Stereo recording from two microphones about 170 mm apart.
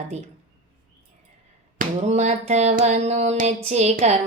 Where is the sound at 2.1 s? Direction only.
40° right (ahead or behind).